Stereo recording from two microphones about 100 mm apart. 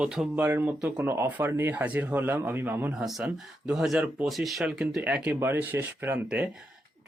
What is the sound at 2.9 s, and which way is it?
Speech, 5° right (ahead or behind).